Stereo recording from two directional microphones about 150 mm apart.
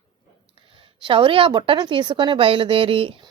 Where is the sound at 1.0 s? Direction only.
35° right (ahead or behind).